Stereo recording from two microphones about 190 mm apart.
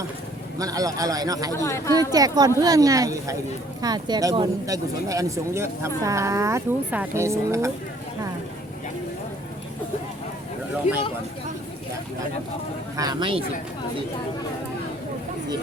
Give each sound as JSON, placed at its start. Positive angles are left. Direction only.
{"t": 0.6, "sound": "speech", "side_deg": -20}
{"t": 1.5, "sound": "speech", "side_deg": 15}
{"t": 2.1, "sound": "speech", "side_deg": -20}
{"t": 13.0, "sound": "speech", "side_deg": -20}